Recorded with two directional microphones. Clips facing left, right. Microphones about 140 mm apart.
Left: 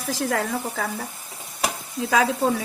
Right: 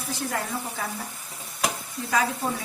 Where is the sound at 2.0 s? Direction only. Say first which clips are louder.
Left 5 dB; 90° left.